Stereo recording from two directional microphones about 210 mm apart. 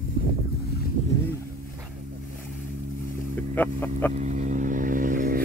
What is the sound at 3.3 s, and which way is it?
Boat, 10° left (ahead or behind).